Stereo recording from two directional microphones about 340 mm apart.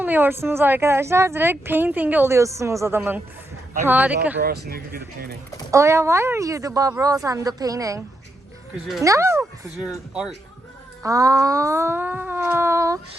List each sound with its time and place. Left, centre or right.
0.0 s a woman's voice: centre
4.4 s speech: right
5.7 s a woman's voice: centre